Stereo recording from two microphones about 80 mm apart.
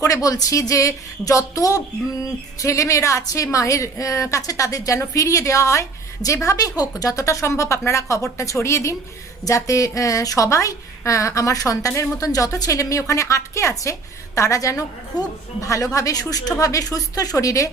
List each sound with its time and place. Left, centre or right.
0.0 s a woman's voice: left